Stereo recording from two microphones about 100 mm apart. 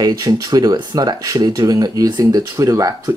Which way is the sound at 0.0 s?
40° right (ahead or behind).